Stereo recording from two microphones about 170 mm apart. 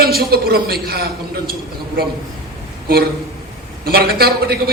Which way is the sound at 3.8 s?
65° right (ahead or behind).